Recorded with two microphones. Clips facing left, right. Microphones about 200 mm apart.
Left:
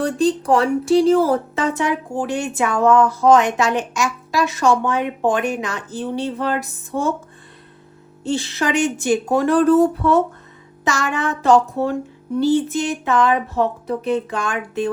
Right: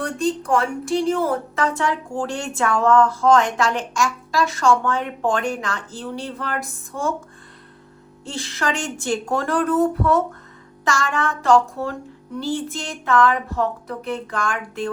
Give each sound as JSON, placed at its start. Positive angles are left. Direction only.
{"t": 0.5, "sound": "speech", "side_deg": 35}
{"t": 8.2, "sound": "speech", "side_deg": 25}